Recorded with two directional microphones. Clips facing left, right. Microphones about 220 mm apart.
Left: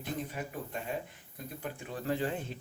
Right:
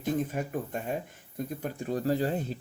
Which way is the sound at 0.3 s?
45° right (ahead or behind).